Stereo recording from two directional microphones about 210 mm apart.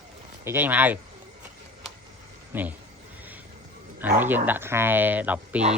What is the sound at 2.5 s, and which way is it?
Speech, 10° right (ahead or behind).